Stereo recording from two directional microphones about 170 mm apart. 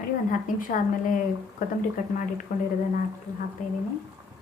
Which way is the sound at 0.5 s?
50° left (ahead or behind).